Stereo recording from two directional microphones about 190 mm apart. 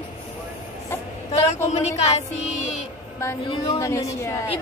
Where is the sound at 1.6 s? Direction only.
35° left (ahead or behind).